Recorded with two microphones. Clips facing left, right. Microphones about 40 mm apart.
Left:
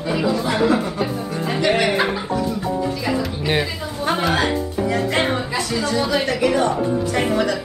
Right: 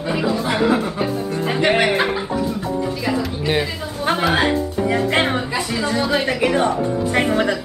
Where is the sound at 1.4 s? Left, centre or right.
Right.